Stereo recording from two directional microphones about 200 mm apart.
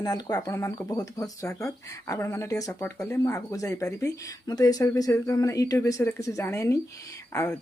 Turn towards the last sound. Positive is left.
turn(degrees=15)  # may be behind; listen again after turning